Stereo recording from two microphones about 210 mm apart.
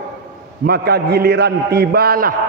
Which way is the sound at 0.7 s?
50° right (ahead or behind).